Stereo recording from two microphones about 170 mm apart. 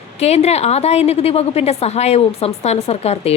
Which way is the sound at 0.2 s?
40° left (ahead or behind).